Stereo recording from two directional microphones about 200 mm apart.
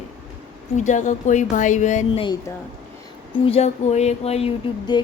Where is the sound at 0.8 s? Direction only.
35° left (ahead or behind).